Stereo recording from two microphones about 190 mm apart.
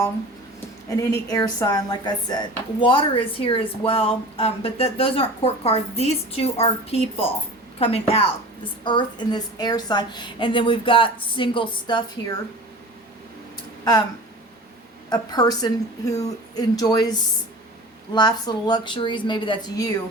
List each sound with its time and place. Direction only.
0.9 s a woman's voice: 15° left (ahead or behind)
15.1 s speech: 20° left (ahead or behind)